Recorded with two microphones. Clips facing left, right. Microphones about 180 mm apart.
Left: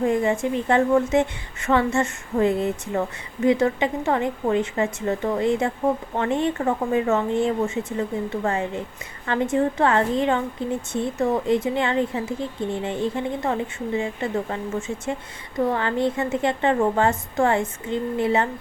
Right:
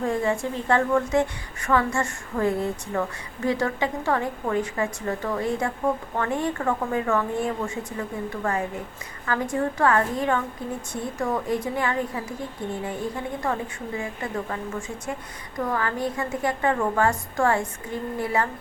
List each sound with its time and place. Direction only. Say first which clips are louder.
0.0 s a woman's voice: left 4 dB; 20° left (ahead or behind)